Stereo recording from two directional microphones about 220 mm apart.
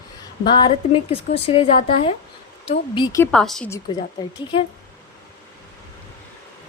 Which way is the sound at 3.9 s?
20° left (ahead or behind).